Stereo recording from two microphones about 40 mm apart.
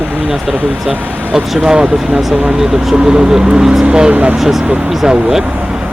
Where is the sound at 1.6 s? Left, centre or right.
Centre.